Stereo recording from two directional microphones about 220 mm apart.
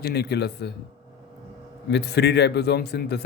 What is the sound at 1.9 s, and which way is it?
A man's voice, 50° left (ahead or behind).